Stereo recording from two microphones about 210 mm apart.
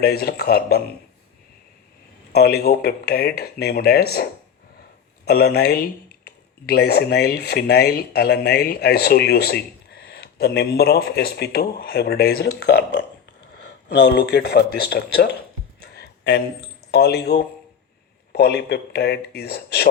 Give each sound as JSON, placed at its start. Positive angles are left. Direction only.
{"t": 0.0, "sound": "speech", "side_deg": 50}
{"t": 2.3, "sound": "speech", "side_deg": 50}
{"t": 15.8, "sound": "a sound", "side_deg": 50}
{"t": 16.9, "sound": "speech", "side_deg": 50}